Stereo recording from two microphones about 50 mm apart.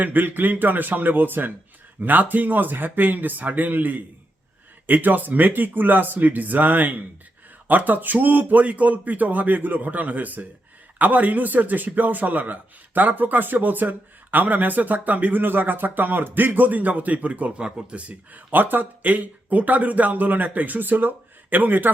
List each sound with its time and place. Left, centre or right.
0.0 s a man's voice: right